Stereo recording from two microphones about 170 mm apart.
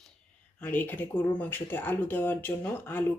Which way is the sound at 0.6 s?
10° left (ahead or behind).